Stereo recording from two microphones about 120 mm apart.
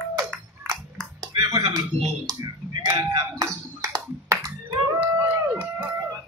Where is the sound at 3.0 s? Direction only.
30° right (ahead or behind).